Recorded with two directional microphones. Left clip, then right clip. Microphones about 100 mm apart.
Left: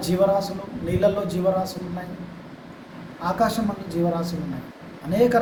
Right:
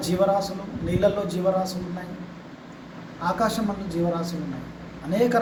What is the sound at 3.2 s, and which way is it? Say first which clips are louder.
A man's voice: left 2 dB; 15° left (ahead or behind).